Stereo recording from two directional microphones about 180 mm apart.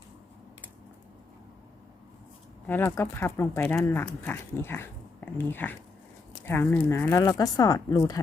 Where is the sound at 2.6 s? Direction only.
15° left (ahead or behind).